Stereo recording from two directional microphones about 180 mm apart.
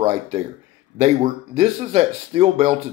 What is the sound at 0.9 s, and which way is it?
Speech, 40° right (ahead or behind).